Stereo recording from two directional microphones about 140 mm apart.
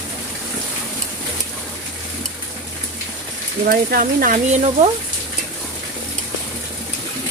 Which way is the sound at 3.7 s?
90° right.